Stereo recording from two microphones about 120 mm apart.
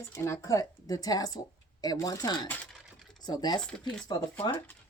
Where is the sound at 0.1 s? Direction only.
25° left (ahead or behind).